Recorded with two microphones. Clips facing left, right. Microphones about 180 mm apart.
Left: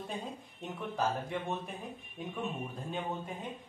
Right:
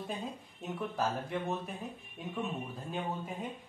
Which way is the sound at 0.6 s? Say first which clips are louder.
Even; 5° right (ahead or behind).